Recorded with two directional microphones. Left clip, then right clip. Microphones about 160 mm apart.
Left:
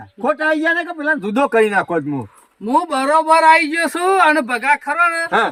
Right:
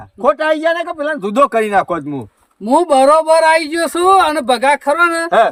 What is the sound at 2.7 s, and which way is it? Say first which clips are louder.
A man's voice: right 6 dB; 40° right (ahead or behind).